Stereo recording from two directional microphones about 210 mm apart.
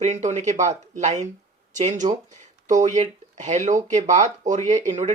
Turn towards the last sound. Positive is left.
turn(degrees=-35)  # may be behind; listen again after turning